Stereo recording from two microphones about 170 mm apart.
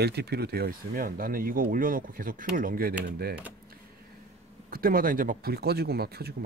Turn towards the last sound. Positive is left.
turn(degrees=-65)  # may be behind; listen again after turning